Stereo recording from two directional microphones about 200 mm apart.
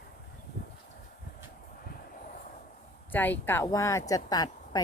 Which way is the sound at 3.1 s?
10° left (ahead or behind).